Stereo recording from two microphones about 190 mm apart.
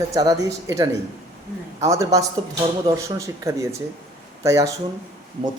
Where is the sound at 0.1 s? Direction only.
20° right (ahead or behind).